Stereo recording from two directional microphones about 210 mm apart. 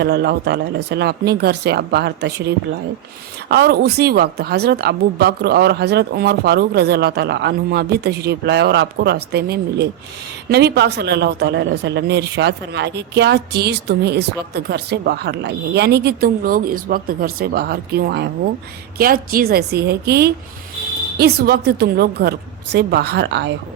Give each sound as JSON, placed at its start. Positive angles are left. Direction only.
{"t": 0.0, "sound": "a man's voice", "side_deg": -50}
{"t": 3.5, "sound": "a man's voice", "side_deg": -50}